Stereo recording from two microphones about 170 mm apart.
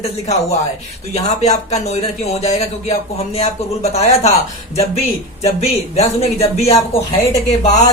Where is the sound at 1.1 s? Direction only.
40° left (ahead or behind).